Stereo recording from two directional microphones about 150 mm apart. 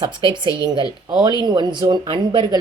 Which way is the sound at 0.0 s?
30° right (ahead or behind).